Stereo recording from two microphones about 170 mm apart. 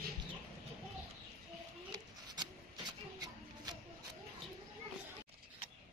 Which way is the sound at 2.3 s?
25° right (ahead or behind).